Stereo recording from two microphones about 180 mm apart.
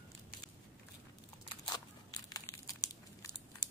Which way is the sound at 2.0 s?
20° left (ahead or behind).